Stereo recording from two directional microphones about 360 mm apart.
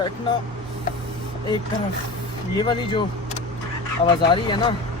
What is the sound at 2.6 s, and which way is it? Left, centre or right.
Speech, centre.